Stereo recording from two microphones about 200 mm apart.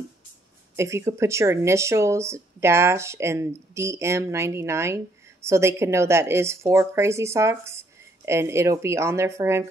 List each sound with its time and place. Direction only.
0.7 s speech: 15° right (ahead or behind)